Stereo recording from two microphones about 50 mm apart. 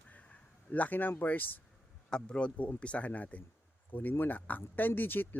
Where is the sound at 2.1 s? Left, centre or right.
Centre; by 5.4 s left.